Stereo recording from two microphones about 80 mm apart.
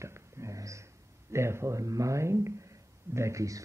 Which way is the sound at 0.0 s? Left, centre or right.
Right.